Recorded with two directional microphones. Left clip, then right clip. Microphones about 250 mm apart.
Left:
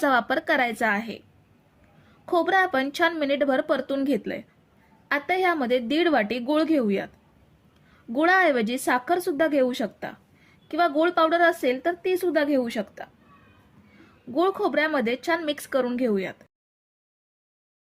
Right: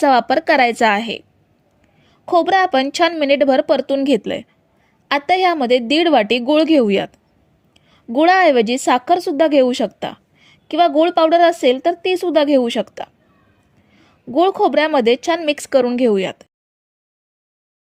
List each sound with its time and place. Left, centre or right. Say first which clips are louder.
0.0 s a woman's voice: right 9 dB; right
2.2 s a woman's voice: right 8 dB; right
7.7 s a sound: right 9 dB; right
8.8 s a woman's voice: right 9 dB; right
14.3 s a woman's voice: right 9 dB; right